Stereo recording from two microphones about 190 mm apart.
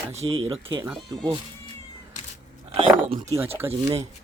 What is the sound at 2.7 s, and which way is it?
Speech, 25° right (ahead or behind).